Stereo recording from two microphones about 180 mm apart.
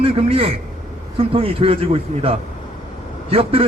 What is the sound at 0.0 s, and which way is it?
A man's voice, 30° right (ahead or behind).